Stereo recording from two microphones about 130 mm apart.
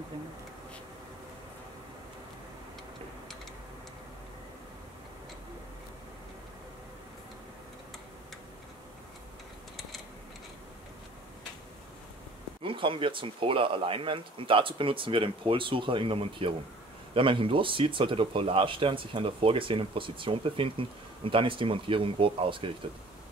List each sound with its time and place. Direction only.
12.6 s speech: 40° right (ahead or behind)